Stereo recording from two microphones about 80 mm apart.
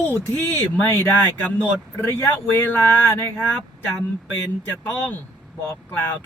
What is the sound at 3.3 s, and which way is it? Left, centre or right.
Speech, centre.